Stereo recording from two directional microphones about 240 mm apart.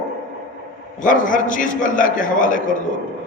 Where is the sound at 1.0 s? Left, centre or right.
Left.